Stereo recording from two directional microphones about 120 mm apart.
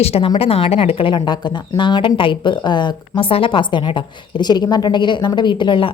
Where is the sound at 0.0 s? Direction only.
55° left (ahead or behind).